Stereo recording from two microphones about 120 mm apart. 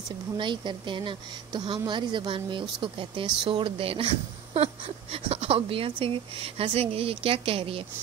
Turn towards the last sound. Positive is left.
turn(degrees=-50)  # may be behind; listen again after turning